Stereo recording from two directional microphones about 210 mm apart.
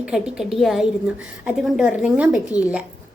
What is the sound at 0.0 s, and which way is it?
A woman's voice, 5° right (ahead or behind).